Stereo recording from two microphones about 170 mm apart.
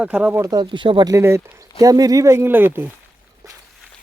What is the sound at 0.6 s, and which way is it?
Speech, 30° right (ahead or behind).